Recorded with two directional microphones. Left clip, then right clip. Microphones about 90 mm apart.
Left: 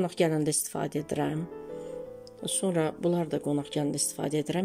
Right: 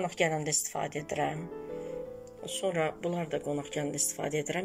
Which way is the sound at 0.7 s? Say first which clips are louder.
Left 2 dB; 35° left (ahead or behind).